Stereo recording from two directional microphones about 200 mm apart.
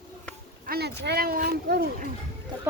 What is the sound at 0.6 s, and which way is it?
Speech, 50° right (ahead or behind).